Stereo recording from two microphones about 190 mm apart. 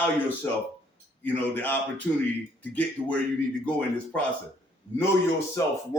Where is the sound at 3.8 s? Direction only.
10° left (ahead or behind).